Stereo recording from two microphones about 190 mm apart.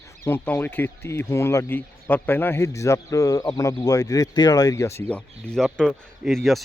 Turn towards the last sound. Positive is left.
turn(degrees=0)  # may be behind; listen again after turning